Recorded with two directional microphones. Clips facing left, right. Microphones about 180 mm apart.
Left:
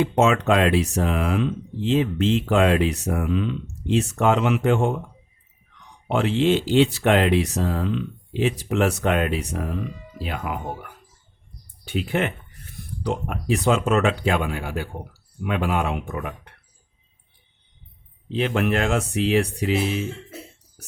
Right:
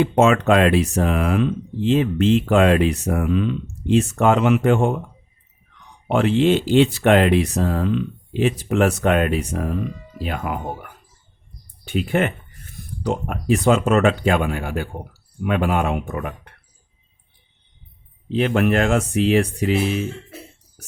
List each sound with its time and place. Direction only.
0.0 s speech: 55° right (ahead or behind)
6.1 s speech: 55° right (ahead or behind)
18.3 s speech: 50° right (ahead or behind)